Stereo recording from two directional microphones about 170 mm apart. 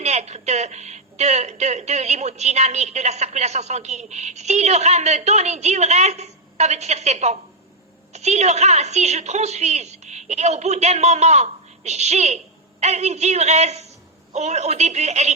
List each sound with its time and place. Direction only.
0.0 s speech: 40° right (ahead or behind)